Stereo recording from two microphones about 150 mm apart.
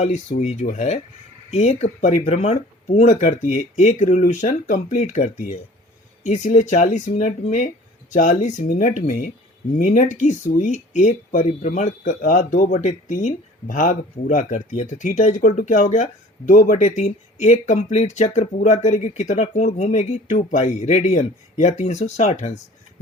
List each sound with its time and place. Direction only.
0.0 s speech: 50° left (ahead or behind)